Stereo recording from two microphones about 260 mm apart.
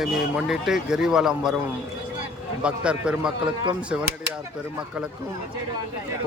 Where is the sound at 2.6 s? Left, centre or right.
Centre.